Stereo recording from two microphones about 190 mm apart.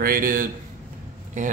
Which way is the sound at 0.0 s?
50° right (ahead or behind).